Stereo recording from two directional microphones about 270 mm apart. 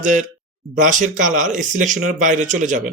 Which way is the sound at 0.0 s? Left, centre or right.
Right.